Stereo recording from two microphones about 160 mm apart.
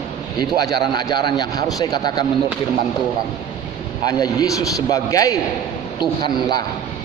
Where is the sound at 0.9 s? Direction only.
25° left (ahead or behind).